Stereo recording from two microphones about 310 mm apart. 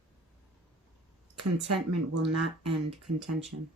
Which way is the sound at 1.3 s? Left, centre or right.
Right.